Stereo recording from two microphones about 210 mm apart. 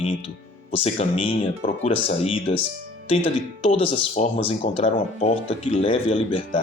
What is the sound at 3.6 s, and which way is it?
Speech, 30° left (ahead or behind).